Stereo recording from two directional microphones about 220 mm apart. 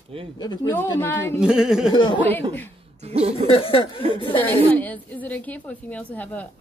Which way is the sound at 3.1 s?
30° right (ahead or behind).